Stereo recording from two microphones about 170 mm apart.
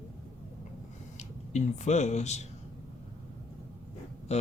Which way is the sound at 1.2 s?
45° left (ahead or behind).